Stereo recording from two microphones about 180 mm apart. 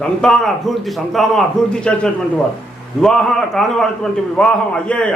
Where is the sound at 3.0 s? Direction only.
Centre (ahead or behind).